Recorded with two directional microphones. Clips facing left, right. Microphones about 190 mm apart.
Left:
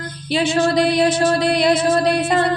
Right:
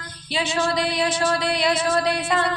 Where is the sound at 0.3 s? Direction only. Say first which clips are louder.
Left 7 dB; 50° left (ahead or behind).